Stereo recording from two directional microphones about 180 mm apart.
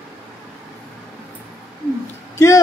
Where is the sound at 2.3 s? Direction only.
15° left (ahead or behind).